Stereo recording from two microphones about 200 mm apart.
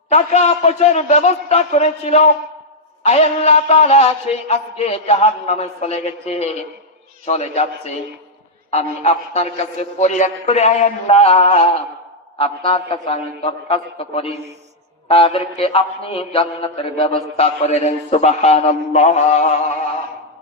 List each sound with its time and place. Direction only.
0.1 s mantra: 35° left (ahead or behind)
12.4 s a man's voice: 25° left (ahead or behind)
15.0 s mantra: 25° left (ahead or behind)